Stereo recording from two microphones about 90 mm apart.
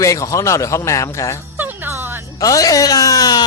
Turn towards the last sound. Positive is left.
turn(degrees=45)  # may be behind; listen again after turning